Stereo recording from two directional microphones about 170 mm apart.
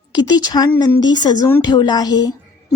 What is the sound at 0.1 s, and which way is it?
A woman's voice, 25° left (ahead or behind).